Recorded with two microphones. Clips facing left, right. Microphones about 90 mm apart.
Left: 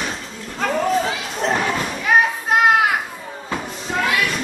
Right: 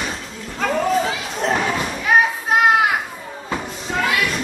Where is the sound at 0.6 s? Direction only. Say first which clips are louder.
Even; centre (ahead or behind).